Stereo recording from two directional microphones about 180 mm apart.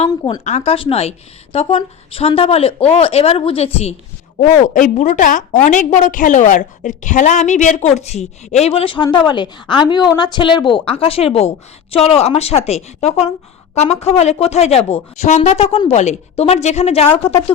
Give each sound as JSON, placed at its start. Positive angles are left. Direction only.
{"t": 0.1, "sound": "speech", "side_deg": 20}
{"t": 0.4, "sound": "a woman's voice", "side_deg": 35}